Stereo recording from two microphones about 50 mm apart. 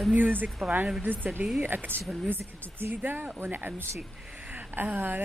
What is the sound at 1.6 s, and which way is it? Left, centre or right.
A woman's voice, right.